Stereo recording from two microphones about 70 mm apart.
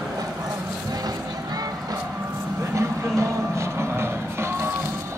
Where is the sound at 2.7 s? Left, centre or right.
Right.